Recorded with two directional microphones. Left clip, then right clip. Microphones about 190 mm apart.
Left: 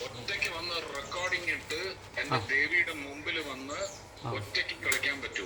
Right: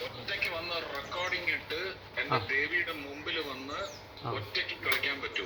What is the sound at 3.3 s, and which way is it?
A man's voice, 10° left (ahead or behind).